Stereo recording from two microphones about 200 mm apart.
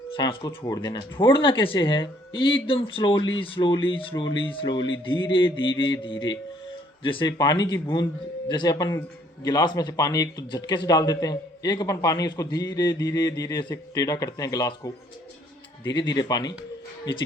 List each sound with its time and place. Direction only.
0.2 s speech: 20° left (ahead or behind)